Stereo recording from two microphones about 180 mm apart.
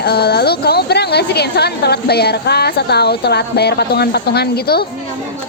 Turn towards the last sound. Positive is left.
turn(degrees=60)  # may be behind; listen again after turning